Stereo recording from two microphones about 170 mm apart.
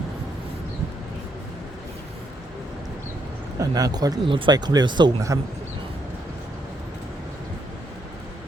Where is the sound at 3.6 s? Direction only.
20° right (ahead or behind).